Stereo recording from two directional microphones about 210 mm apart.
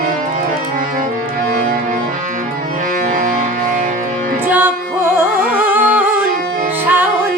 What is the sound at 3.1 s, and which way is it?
Music, 40° right (ahead or behind).